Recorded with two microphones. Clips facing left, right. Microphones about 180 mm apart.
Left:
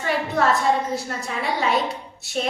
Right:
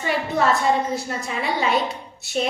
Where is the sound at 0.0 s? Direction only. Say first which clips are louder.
Even; centre (ahead or behind).